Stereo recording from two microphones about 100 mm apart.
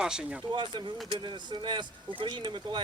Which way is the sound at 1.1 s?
50° right (ahead or behind).